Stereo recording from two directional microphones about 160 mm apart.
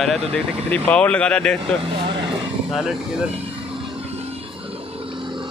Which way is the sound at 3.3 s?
40° right (ahead or behind).